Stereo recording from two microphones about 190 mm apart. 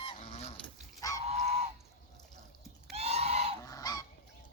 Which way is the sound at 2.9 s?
35° right (ahead or behind).